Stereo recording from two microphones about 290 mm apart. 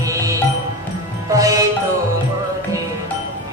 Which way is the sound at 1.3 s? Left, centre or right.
Centre.